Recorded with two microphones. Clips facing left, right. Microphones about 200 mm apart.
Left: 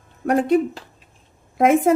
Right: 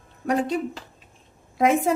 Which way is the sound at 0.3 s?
55° left (ahead or behind).